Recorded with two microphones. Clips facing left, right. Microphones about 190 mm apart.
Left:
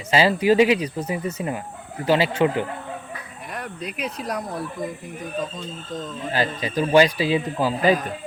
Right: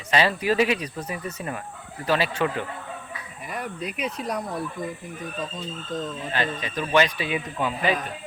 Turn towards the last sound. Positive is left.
turn(degrees=35)  # may be behind; listen again after turning